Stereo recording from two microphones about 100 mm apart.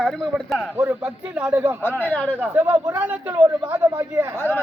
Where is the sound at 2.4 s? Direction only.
20° right (ahead or behind).